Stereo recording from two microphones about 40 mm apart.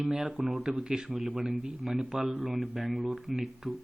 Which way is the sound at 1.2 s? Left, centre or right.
Right.